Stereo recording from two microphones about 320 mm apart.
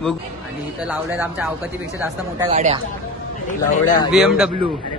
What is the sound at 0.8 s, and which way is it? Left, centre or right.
Speech, centre.